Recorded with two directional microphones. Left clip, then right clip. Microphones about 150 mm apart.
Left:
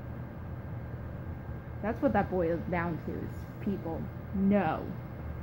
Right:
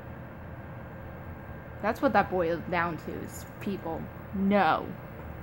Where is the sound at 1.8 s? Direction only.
25° right (ahead or behind).